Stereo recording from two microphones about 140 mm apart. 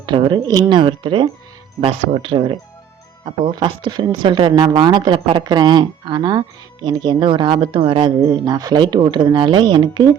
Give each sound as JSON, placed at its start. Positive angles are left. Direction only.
{"t": 0.0, "sound": "speech", "side_deg": -35}